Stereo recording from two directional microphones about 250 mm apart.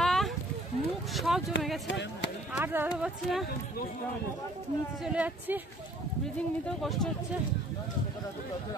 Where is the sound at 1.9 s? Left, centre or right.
Left.